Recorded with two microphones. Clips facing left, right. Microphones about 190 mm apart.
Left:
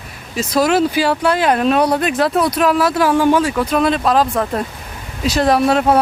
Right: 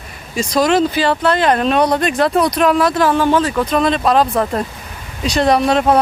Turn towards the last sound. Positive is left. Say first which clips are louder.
# even
turn(degrees=5)  # may be behind; listen again after turning